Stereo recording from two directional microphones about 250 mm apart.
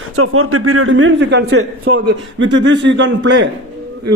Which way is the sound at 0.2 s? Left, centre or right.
Right.